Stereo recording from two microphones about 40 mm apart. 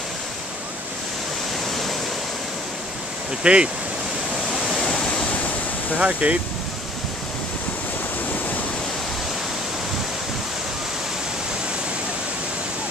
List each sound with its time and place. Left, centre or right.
3.4 s speech: right
5.9 s speech: right